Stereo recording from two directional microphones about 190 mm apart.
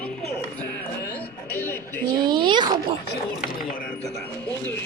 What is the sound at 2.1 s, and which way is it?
Speech, 25° right (ahead or behind).